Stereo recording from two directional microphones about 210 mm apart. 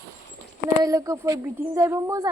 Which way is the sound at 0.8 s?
15° right (ahead or behind).